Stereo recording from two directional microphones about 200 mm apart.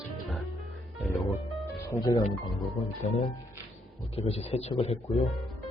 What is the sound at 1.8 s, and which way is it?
Speech, 15° left (ahead or behind).